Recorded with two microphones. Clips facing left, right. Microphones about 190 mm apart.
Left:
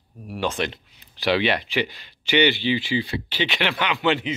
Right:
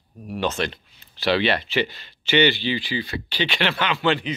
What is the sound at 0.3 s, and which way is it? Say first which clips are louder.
Speech: right 1 dB; 10° left (ahead or behind).